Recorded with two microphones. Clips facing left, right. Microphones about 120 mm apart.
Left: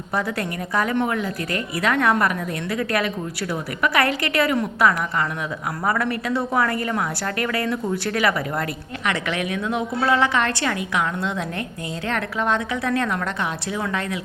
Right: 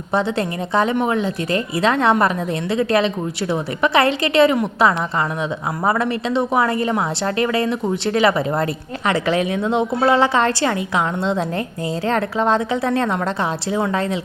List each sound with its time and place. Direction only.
0.1 s a woman's voice: 25° right (ahead or behind)